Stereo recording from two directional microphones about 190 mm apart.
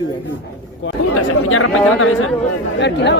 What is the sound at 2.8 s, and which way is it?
Speech, 65° left (ahead or behind).